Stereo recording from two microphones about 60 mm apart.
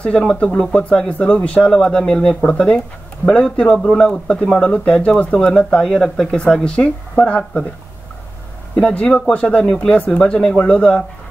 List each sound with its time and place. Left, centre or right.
0.0 s speech: centre
6.3 s speech: centre
8.7 s speech: centre